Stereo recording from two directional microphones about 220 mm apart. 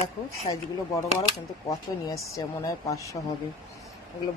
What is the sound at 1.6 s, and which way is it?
Speech, 15° left (ahead or behind).